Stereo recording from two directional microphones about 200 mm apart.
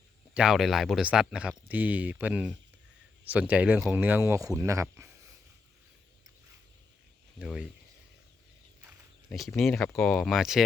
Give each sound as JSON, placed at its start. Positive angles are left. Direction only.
{"t": 0.3, "sound": "speech", "side_deg": 0}
{"t": 7.3, "sound": "speech", "side_deg": -5}
{"t": 9.3, "sound": "speech", "side_deg": 0}